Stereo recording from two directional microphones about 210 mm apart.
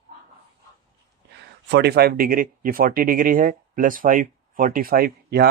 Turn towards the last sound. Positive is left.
turn(degrees=-45)  # may be behind; listen again after turning